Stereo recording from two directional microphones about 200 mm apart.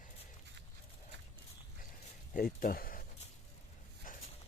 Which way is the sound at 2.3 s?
45° left (ahead or behind).